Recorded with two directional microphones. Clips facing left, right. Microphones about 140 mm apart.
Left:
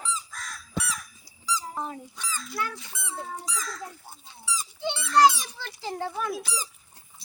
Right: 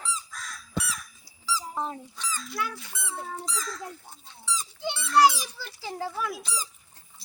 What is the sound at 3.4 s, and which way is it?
Speech, 10° left (ahead or behind).